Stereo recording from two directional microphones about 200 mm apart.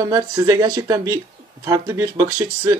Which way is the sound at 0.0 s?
20° right (ahead or behind).